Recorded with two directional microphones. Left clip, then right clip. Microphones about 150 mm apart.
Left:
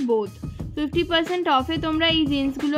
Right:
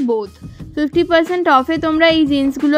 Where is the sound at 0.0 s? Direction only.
40° right (ahead or behind).